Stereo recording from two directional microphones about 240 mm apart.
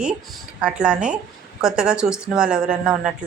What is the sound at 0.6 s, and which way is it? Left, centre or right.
A woman's voice, centre.